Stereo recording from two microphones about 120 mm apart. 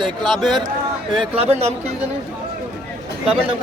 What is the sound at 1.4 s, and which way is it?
Speech, 60° right (ahead or behind).